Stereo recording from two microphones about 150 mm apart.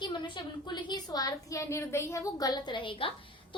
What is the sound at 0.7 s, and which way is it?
A woman's voice, 30° left (ahead or behind).